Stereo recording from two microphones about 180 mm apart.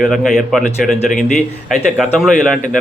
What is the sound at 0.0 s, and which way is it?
A man's voice, centre (ahead or behind).